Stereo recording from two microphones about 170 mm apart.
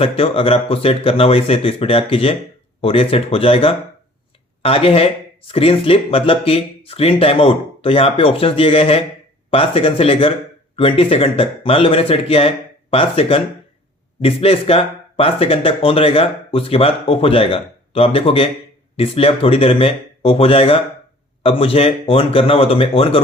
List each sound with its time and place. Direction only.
0.0 s speech: 35° left (ahead or behind)